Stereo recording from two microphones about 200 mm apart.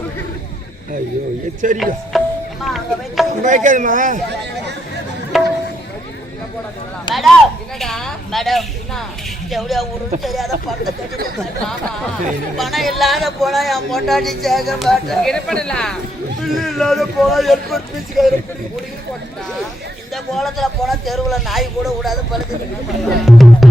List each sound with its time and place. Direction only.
1.6 s speech: 40° right (ahead or behind)
2.1 s music: centre (ahead or behind)
2.6 s speech: centre (ahead or behind)
3.4 s speech: 40° right (ahead or behind)
5.3 s music: centre (ahead or behind)
7.1 s speech: centre (ahead or behind)
12.5 s speech: centre (ahead or behind)
20.3 s speech: centre (ahead or behind)
23.2 s music: centre (ahead or behind)